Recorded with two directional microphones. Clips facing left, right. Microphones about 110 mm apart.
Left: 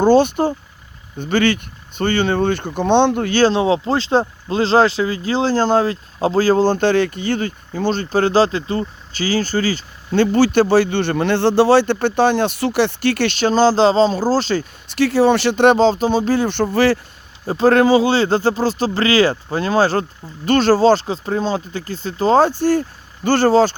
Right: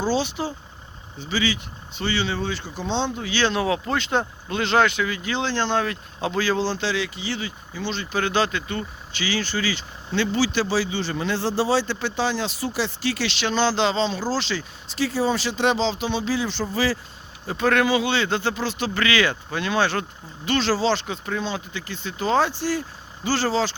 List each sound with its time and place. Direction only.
0.0 s speech: 55° left (ahead or behind)
3.4 s speech: 30° left (ahead or behind); by 14.9 s 45° left (ahead or behind)
14.9 s speech: 70° left (ahead or behind)
17.4 s speech: 35° left (ahead or behind)